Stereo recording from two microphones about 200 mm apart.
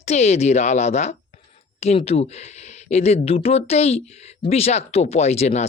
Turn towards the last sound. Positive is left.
turn(degrees=35)  # may be behind; listen again after turning